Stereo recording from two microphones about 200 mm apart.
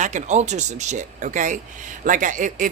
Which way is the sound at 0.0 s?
35° right (ahead or behind).